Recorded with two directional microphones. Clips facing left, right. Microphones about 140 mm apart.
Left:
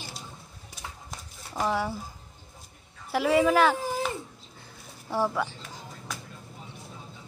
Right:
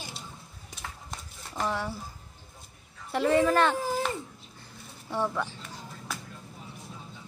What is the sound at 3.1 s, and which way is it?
Speech, 5° left (ahead or behind).